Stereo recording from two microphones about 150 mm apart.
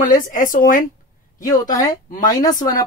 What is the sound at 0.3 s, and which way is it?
Speech, 65° left (ahead or behind).